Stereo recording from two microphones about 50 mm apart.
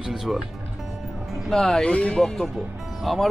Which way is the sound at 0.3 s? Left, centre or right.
Centre.